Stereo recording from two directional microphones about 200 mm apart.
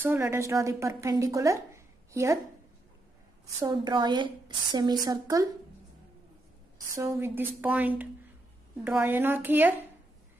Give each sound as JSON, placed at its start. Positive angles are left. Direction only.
{"t": 0.0, "sound": "speech", "side_deg": -10}
{"t": 3.6, "sound": "a woman's voice", "side_deg": -20}
{"t": 7.0, "sound": "speech", "side_deg": -10}